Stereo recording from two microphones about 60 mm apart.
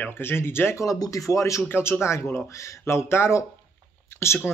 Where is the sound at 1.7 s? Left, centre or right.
Left.